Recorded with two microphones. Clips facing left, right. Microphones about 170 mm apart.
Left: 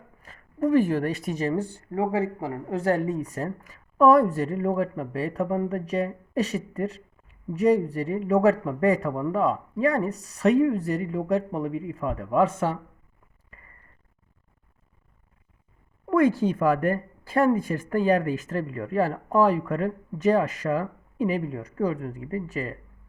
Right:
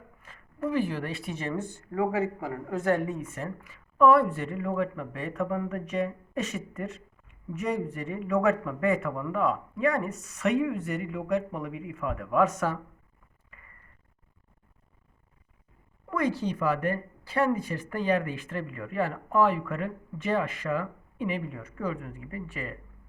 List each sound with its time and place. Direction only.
0.2 s speech: 40° left (ahead or behind)
16.0 s speech: 50° left (ahead or behind)